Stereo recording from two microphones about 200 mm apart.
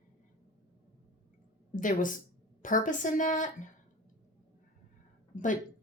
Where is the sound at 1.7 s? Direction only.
40° left (ahead or behind).